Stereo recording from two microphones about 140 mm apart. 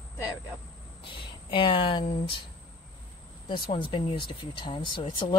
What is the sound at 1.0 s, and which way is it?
Speech, 35° left (ahead or behind).